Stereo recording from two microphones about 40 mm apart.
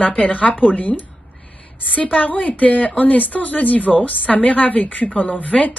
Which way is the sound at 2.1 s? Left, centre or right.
Left.